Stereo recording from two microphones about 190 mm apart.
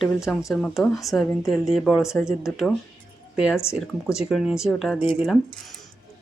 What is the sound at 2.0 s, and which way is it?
Speech, 15° left (ahead or behind).